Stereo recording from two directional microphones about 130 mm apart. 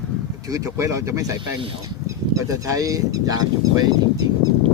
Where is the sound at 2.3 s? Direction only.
25° right (ahead or behind).